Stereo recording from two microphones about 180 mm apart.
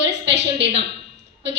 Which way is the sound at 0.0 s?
75° right (ahead or behind).